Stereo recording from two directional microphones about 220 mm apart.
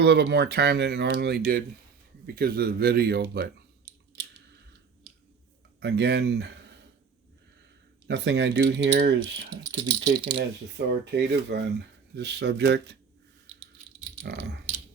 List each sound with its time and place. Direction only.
0.0 s speech: 50° right (ahead or behind)
5.8 s speech: 50° right (ahead or behind)
8.0 s speech: 50° right (ahead or behind)
9.6 s speech: 15° right (ahead or behind)
11.0 s speech: 50° right (ahead or behind)
14.3 s speech: 50° right (ahead or behind)